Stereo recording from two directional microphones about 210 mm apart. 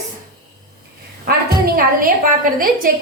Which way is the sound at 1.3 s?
45° right (ahead or behind).